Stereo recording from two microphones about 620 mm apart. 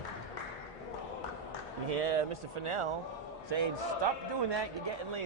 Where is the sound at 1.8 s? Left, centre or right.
Right.